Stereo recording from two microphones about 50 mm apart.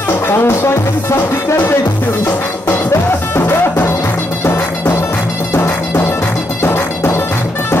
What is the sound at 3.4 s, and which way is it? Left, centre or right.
Music, left.